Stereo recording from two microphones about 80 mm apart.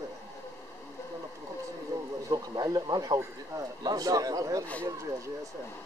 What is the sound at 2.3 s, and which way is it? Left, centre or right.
Speech, right.